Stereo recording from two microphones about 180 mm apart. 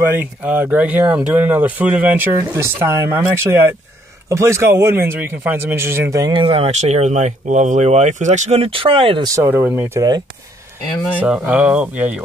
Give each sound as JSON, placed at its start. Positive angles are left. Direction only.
{"t": 0.0, "sound": "a man's voice", "side_deg": -10}
{"t": 9.3, "sound": "speech", "side_deg": -10}
{"t": 11.1, "sound": "speech", "side_deg": -5}